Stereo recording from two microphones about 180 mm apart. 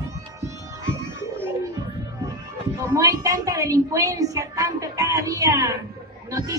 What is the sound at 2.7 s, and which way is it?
A woman's voice, 15° right (ahead or behind).